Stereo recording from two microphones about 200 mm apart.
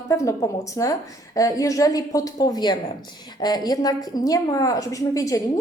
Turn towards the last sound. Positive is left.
turn(degrees=15)  # may be behind; listen again after turning